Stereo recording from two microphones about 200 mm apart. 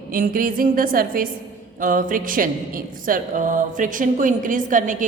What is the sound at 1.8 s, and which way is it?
Mantra, 40° right (ahead or behind).